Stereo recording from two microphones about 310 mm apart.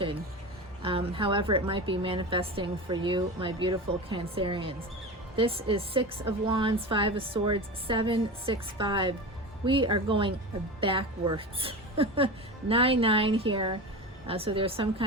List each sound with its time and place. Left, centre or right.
0.8 s a woman's voice: centre